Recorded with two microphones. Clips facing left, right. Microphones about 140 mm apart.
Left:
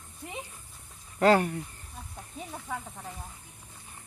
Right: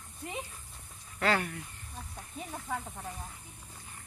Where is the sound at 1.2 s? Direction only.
40° left (ahead or behind).